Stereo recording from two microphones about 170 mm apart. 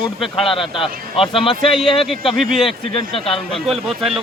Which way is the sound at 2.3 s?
Centre (ahead or behind).